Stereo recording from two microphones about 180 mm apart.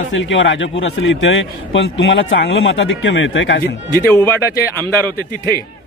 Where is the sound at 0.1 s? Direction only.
90° left; by 4.0 s 70° left (ahead or behind).